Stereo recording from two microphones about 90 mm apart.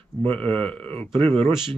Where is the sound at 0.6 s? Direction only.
15° left (ahead or behind).